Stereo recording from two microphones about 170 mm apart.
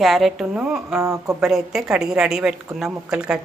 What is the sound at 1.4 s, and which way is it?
A woman's voice, centre (ahead or behind).